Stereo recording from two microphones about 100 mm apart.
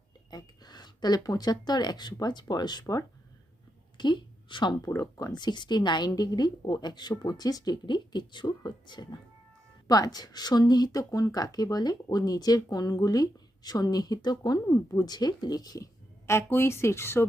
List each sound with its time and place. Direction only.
0.3 s speech: 45° left (ahead or behind)
3.9 s a sound: 50° left (ahead or behind)
4.8 s speech: 35° left (ahead or behind)
16.2 s speech: 25° left (ahead or behind)